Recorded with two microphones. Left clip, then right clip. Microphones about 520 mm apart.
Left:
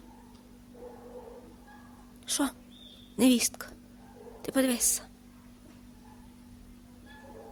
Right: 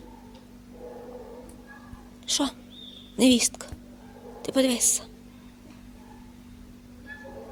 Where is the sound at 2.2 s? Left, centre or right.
Left.